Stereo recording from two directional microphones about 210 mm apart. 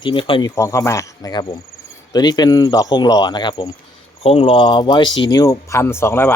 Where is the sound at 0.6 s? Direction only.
15° left (ahead or behind).